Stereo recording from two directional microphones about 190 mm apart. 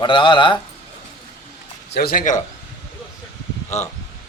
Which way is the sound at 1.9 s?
55° left (ahead or behind).